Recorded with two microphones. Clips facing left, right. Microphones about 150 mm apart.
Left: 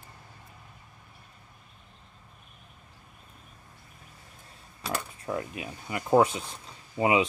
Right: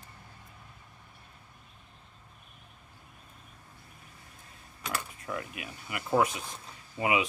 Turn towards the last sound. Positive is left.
turn(degrees=30)  # may be behind; listen again after turning